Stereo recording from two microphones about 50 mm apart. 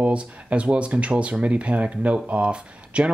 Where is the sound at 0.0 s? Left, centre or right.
Right.